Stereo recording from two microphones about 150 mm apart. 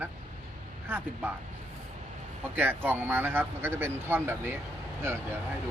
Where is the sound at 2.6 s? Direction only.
15° right (ahead or behind).